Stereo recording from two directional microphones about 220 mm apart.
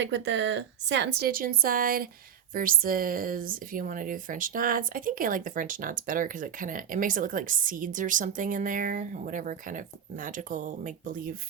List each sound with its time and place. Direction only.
0.0 s speech: 55° right (ahead or behind); by 11.3 s 40° right (ahead or behind)